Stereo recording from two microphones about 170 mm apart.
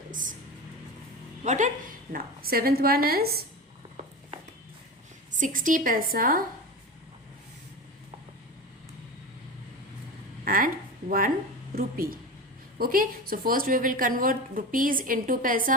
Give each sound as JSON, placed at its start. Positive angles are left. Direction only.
{"t": 0.1, "sound": "a sound", "side_deg": -50}
{"t": 1.5, "sound": "a woman's voice", "side_deg": -45}
{"t": 2.1, "sound": "a woman's voice", "side_deg": -60}
{"t": 5.4, "sound": "a woman's voice", "side_deg": -50}
{"t": 10.4, "sound": "a sound", "side_deg": -55}
{"t": 11.7, "sound": "a woman's voice", "side_deg": -55}